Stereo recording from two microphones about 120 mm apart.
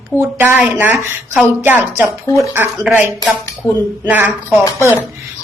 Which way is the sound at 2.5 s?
15° right (ahead or behind).